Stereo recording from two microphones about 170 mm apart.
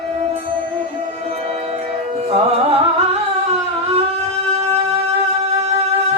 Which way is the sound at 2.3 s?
35° right (ahead or behind).